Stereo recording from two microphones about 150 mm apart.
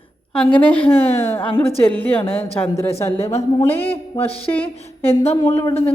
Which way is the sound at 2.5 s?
15° left (ahead or behind).